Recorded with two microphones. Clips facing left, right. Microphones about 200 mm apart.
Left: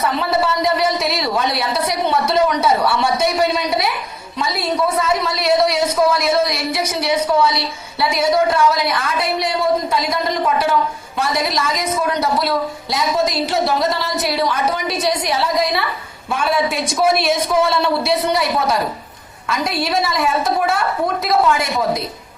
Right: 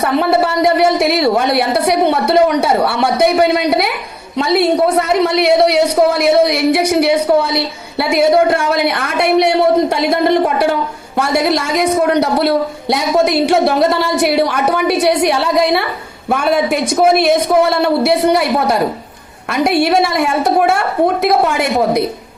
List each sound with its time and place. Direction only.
0.0 s a man's voice: 60° right (ahead or behind)